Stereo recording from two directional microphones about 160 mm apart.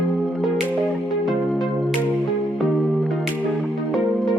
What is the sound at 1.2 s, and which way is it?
Music, centre (ahead or behind).